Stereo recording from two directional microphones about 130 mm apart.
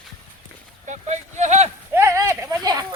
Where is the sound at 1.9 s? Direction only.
20° right (ahead or behind).